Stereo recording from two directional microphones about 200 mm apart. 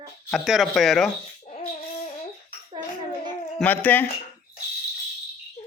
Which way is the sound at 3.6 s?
10° left (ahead or behind).